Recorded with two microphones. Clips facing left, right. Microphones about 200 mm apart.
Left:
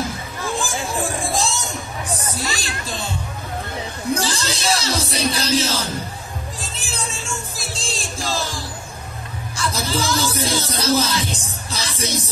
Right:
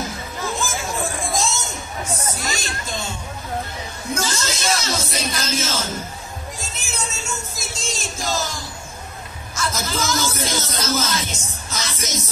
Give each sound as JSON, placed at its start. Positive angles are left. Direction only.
{"t": 0.7, "sound": "chatter", "side_deg": 30}
{"t": 2.0, "sound": "music", "side_deg": 35}
{"t": 4.1, "sound": "music", "side_deg": 35}
{"t": 9.6, "sound": "a sound", "side_deg": 30}
{"t": 10.7, "sound": "music", "side_deg": 30}